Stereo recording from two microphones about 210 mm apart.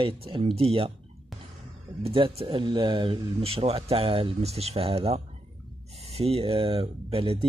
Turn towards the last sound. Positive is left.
turn(degrees=-25)  # may be behind; listen again after turning